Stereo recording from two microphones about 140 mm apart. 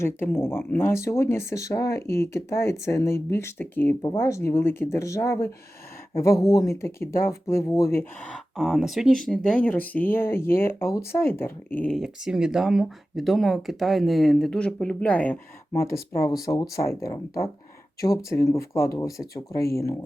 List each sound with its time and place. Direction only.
0.0 s speech: 15° left (ahead or behind)
8.5 s speech: centre (ahead or behind)
11.9 s speech: 5° right (ahead or behind); by 20.0 s 20° left (ahead or behind)